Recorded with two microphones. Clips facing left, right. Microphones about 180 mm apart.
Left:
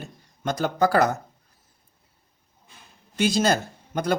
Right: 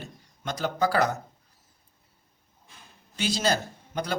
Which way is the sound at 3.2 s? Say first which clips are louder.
Left 5 dB; 50° left (ahead or behind).